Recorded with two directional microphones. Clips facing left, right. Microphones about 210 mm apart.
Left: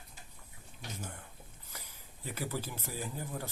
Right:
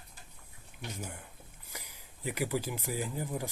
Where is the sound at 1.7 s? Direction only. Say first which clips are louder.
Right 3 dB; 10° right (ahead or behind).